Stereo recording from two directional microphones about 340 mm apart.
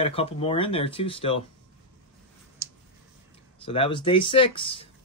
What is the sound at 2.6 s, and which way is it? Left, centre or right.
Clicking, centre.